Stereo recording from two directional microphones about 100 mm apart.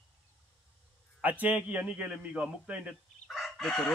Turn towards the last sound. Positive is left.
turn(degrees=5)  # may be behind; listen again after turning